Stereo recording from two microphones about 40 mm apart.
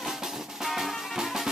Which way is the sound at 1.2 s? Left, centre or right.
Centre.